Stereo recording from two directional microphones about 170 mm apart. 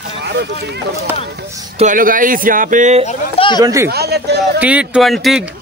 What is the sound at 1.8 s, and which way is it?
Speech, 50° right (ahead or behind).